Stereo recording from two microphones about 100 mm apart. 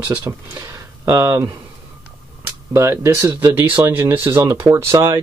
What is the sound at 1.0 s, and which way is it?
Speech, 30° right (ahead or behind).